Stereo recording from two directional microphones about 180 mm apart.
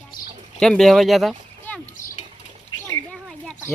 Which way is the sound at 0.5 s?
Centre (ahead or behind).